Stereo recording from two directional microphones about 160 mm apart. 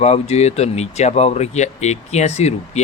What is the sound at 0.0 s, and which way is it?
Speech, 40° left (ahead or behind).